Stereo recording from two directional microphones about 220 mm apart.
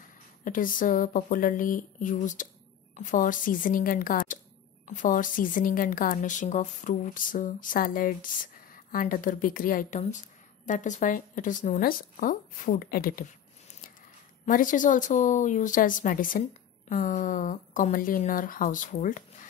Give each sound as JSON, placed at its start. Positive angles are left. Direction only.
{"t": 0.4, "sound": "a woman's voice", "side_deg": 35}
{"t": 14.4, "sound": "a woman's voice", "side_deg": 35}